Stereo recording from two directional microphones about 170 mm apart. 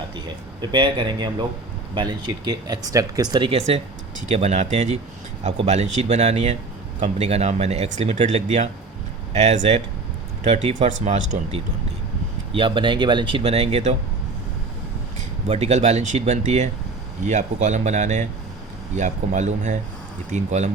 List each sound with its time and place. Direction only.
0.6 s speech: 25° right (ahead or behind)
4.3 s speech: 40° right (ahead or behind)
12.5 s speech: 30° right (ahead or behind)
15.4 s speech: 40° right (ahead or behind)